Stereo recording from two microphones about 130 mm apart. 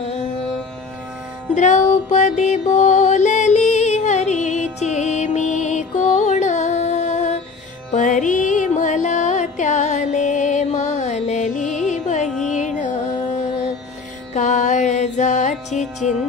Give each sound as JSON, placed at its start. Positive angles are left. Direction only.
{"t": 1.5, "sound": "music", "side_deg": 65}
{"t": 7.9, "sound": "music", "side_deg": 75}
{"t": 14.3, "sound": "music", "side_deg": 70}